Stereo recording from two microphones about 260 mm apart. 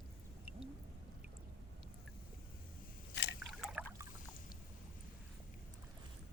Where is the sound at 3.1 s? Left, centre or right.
Left.